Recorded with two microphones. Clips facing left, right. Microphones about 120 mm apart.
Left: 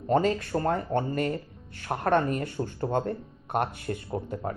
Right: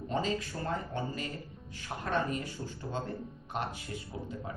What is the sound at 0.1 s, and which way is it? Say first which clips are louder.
Speech: left 10 dB; 60° left (ahead or behind).